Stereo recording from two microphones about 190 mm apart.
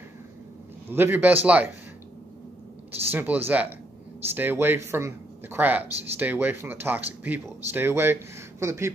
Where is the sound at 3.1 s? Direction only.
10° right (ahead or behind).